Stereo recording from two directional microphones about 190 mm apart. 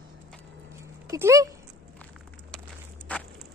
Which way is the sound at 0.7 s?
15° right (ahead or behind).